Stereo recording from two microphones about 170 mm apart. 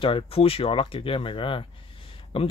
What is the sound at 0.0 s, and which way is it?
Speech, 30° left (ahead or behind).